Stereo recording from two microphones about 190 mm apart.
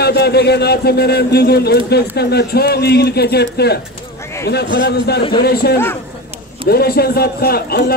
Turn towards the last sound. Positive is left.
turn(degrees=55)  # may be behind; listen again after turning